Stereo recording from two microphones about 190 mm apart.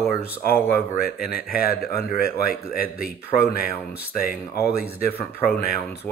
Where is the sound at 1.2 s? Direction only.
50° left (ahead or behind).